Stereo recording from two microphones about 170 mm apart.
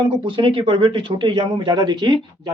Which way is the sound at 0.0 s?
30° right (ahead or behind).